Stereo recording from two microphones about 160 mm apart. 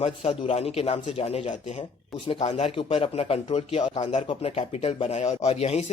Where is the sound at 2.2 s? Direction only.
35° left (ahead or behind).